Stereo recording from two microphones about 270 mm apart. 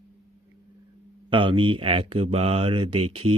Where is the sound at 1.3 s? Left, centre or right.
Centre.